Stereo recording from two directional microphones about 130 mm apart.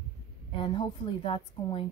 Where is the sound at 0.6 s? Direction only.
40° left (ahead or behind).